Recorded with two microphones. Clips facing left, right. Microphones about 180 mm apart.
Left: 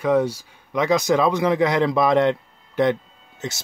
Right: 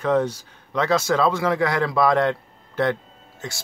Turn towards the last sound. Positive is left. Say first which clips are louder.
# left 4 dB
turn(degrees=20)  # may be behind; listen again after turning